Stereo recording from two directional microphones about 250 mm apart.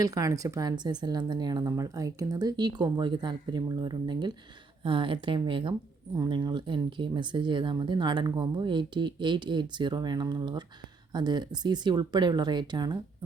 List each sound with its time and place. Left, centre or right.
0.0 s speech: centre